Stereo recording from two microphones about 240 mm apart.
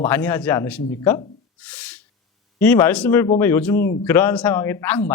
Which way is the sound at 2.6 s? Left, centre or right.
Centre.